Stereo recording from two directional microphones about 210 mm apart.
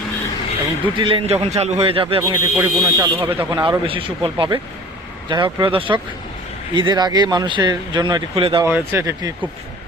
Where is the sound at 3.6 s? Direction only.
25° right (ahead or behind).